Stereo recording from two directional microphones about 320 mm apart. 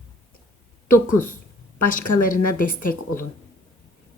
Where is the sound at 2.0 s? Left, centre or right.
Left.